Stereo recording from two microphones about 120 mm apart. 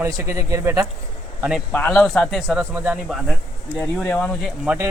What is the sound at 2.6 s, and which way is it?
Speech, 15° right (ahead or behind).